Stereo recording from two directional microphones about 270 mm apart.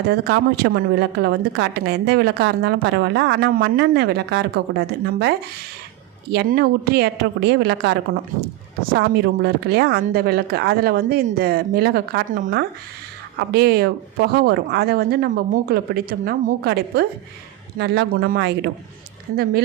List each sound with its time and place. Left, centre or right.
0.1 s a woman's voice: right
6.3 s a woman's voice: right